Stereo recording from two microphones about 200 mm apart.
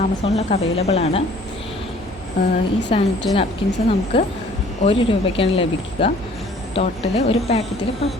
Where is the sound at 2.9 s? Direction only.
25° left (ahead or behind).